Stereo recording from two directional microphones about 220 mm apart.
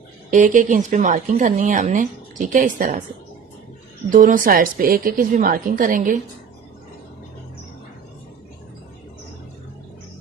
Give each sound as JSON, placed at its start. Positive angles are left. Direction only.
{"t": 0.3, "sound": "speech", "side_deg": -35}
{"t": 4.1, "sound": "speech", "side_deg": -40}